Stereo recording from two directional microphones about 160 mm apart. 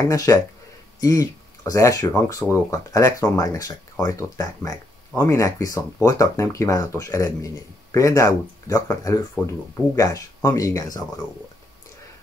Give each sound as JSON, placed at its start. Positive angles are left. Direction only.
{"t": 0.0, "sound": "speech", "side_deg": 20}